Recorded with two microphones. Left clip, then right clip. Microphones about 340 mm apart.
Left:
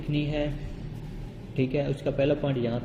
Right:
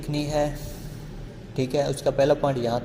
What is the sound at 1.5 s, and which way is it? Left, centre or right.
Speech, right.